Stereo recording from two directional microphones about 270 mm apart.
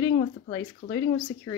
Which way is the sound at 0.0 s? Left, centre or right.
Centre.